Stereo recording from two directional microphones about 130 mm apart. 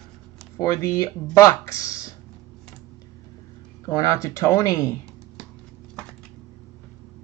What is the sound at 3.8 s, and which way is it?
Speech, 25° left (ahead or behind).